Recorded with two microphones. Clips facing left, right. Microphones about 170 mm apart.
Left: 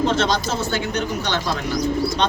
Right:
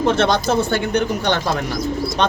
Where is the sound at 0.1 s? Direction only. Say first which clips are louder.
Right 4 dB; 55° right (ahead or behind).